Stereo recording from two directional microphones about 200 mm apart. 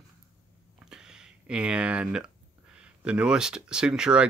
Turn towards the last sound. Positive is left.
turn(degrees=-5)  # may be behind; listen again after turning